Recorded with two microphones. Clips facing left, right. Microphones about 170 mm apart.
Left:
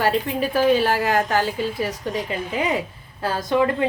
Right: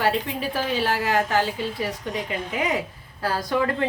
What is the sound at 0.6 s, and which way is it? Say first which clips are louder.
A woman's voice: left 7 dB; 50° left (ahead or behind).